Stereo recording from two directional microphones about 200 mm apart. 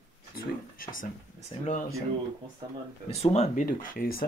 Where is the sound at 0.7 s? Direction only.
45° left (ahead or behind).